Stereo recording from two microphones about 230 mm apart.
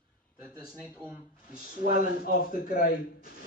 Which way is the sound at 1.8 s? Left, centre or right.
Right.